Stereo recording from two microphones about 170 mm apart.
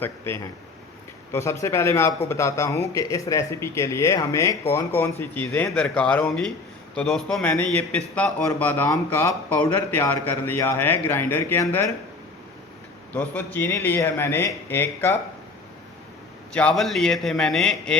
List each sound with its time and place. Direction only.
0.0 s a man's voice: 15° left (ahead or behind)
13.1 s a man's voice: 10° left (ahead or behind)
16.5 s a man's voice: 5° left (ahead or behind)